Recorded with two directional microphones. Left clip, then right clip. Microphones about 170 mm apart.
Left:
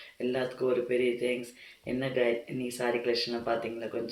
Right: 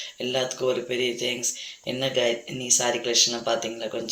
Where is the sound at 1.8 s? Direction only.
25° right (ahead or behind).